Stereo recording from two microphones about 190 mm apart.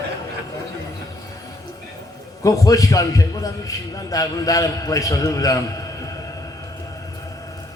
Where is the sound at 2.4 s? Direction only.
15° left (ahead or behind).